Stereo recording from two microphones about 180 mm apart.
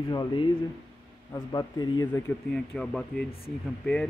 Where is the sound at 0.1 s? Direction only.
25° left (ahead or behind).